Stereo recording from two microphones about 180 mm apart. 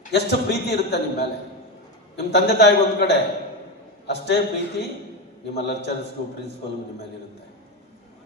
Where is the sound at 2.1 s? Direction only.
70° left (ahead or behind).